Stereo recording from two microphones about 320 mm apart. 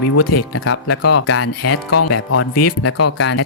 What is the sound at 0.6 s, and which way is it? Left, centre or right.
Speech, left.